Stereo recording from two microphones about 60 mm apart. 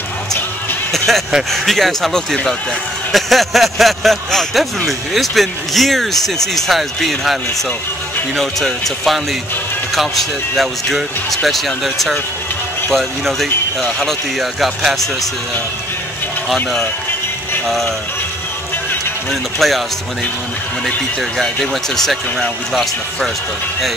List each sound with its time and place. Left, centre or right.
0.9 s speech: centre
8.4 s speech: centre
17.6 s speech: centre
19.6 s speech: centre
20.8 s speech: centre